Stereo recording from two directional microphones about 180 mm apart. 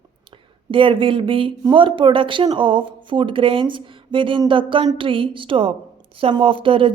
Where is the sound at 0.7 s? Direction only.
30° right (ahead or behind).